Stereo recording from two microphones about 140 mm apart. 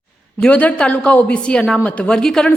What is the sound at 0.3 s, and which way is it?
A woman's voice, 10° left (ahead or behind).